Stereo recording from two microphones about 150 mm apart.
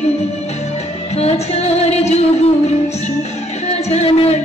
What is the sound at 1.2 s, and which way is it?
Female singing, 45° left (ahead or behind).